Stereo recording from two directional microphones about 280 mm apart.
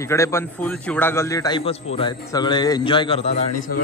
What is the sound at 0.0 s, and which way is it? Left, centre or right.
A man's voice, centre.